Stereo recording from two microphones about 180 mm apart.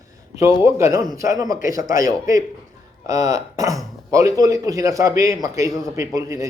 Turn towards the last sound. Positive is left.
turn(degrees=-20)  # may be behind; listen again after turning